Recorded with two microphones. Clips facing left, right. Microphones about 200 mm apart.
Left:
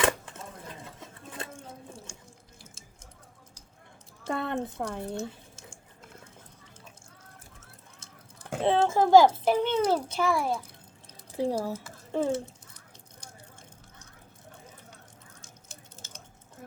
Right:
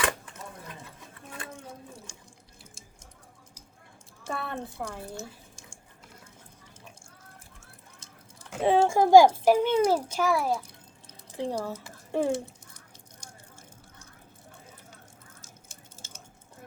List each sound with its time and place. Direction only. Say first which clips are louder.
4.3 s a woman's voice: left 4 dB; 20° left (ahead or behind)
8.6 s a child's voice: right 2 dB; 10° right (ahead or behind)
11.3 s speech: left 3 dB; 10° left (ahead or behind)
11.7 s speech: right 1 dB; 15° right (ahead or behind)